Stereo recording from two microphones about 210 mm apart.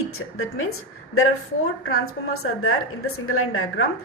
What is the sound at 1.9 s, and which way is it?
A woman's voice, 85° left.